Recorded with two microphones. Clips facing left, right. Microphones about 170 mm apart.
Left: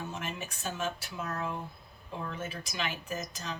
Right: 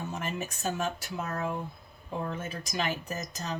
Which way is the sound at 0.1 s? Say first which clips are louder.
Right 4 dB; 40° right (ahead or behind).